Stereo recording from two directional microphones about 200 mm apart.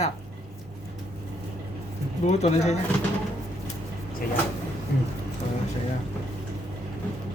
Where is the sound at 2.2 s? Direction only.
35° left (ahead or behind).